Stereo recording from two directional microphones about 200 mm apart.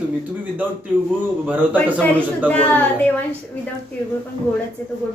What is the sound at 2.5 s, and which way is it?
Speech, 10° left (ahead or behind).